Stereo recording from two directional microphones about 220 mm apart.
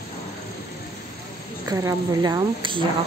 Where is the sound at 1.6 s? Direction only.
15° right (ahead or behind).